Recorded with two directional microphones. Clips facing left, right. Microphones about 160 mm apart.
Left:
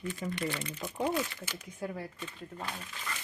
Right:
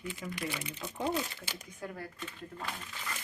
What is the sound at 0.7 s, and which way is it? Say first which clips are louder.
Speech: left 2 dB; 15° left (ahead or behind).